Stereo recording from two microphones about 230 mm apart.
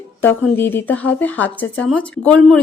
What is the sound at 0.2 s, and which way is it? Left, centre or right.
A woman's voice, centre.